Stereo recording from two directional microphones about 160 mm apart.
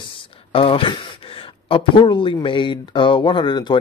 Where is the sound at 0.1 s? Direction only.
35° left (ahead or behind).